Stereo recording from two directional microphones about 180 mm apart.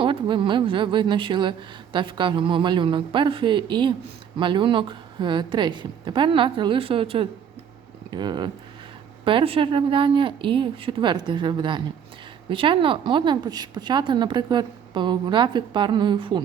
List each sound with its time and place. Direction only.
0.0 s a woman's voice: 30° right (ahead or behind)